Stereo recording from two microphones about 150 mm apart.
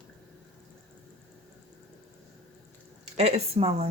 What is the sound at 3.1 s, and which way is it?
Speech, 45° right (ahead or behind).